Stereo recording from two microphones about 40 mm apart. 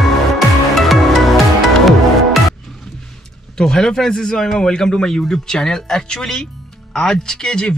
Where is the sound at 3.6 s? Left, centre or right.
Centre.